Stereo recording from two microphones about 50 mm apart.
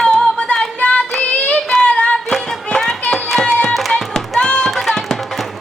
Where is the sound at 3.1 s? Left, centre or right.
Centre.